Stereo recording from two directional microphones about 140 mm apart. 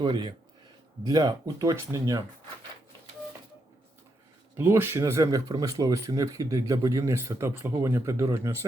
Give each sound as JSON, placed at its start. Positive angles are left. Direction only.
{"t": 0.0, "sound": "speech", "side_deg": -35}
{"t": 4.5, "sound": "speech", "side_deg": -20}